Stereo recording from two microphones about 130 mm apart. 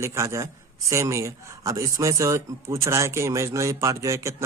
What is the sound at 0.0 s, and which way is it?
A man's voice, 20° right (ahead or behind).